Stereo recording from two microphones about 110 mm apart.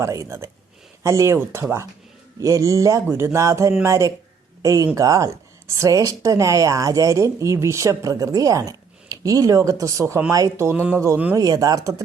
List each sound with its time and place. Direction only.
0.0 s a woman's voice: 25° right (ahead or behind)